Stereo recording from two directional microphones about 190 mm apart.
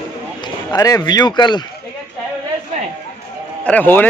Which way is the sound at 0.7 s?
20° left (ahead or behind).